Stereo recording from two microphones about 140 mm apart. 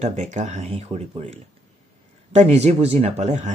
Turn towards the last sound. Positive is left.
turn(degrees=-55)  # may be behind; listen again after turning